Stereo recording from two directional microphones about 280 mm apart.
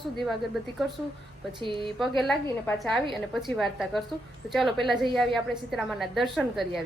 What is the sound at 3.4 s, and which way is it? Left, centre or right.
A woman's voice, centre.